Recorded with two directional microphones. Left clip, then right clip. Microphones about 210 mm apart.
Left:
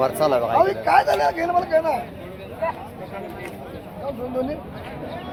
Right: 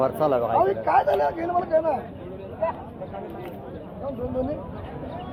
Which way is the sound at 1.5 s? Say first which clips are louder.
Even; 15° left (ahead or behind).